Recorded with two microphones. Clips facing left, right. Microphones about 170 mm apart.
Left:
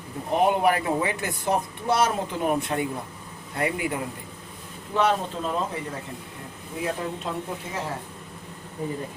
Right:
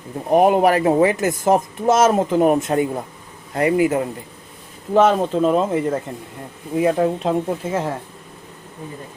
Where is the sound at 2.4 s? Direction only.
45° right (ahead or behind).